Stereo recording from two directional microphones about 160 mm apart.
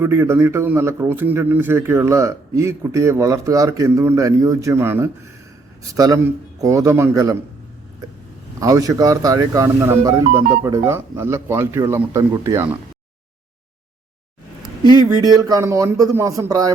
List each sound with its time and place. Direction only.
0.0 s a man's voice: 15° right (ahead or behind)
8.6 s speech: 20° right (ahead or behind)
14.6 s speech: 25° right (ahead or behind)